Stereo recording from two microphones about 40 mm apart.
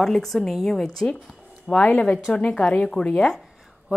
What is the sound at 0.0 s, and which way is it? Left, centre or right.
A woman's voice, centre.